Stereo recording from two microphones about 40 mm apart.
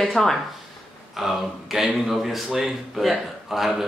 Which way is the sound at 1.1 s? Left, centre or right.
Centre.